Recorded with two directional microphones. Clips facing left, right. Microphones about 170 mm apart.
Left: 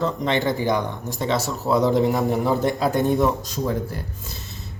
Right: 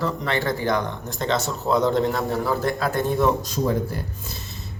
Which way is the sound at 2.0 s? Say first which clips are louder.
Left 3 dB; 20° left (ahead or behind).